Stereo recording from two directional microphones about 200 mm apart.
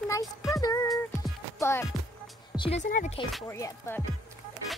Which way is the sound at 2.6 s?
30° left (ahead or behind).